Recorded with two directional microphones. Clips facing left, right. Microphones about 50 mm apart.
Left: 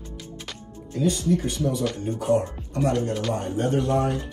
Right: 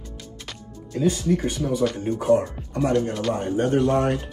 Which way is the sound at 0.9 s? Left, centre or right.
Right.